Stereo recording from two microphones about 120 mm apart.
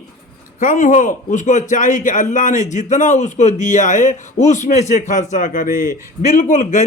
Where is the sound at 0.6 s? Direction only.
90° left.